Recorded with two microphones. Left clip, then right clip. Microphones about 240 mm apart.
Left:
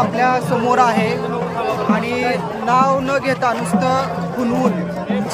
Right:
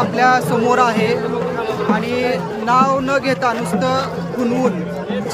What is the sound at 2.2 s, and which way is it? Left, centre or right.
A man's voice, centre.